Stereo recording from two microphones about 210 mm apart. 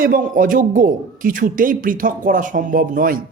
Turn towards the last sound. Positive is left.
turn(degrees=-40)  # may be behind; listen again after turning